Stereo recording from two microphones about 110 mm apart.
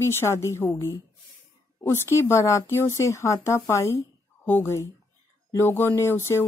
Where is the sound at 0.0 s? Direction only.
25° left (ahead or behind).